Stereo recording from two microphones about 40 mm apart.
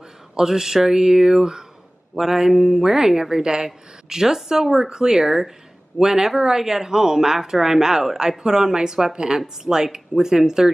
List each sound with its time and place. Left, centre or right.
0.4 s speech: centre